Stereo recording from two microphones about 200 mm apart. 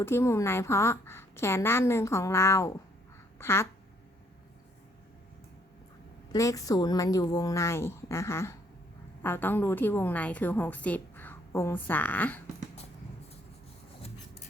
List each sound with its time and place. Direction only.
0.0 s a woman's voice: 10° left (ahead or behind)
6.3 s a woman's voice: 15° left (ahead or behind)